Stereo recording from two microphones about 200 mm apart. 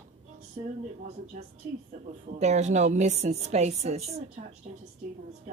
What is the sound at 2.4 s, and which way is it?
A woman's voice, 35° right (ahead or behind).